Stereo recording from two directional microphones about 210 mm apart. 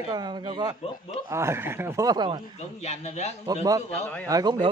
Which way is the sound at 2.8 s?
30° left (ahead or behind).